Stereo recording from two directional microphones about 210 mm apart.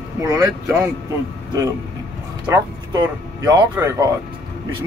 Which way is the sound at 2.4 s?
20° right (ahead or behind).